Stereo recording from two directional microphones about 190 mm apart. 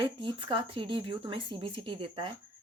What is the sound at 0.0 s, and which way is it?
Speech, 25° right (ahead or behind).